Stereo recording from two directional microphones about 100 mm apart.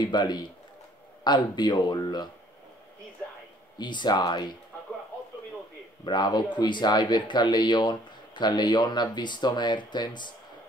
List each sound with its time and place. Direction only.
0.0 s speech: 45° left (ahead or behind)
3.7 s speech: 50° left (ahead or behind)
6.0 s speech: 45° left (ahead or behind)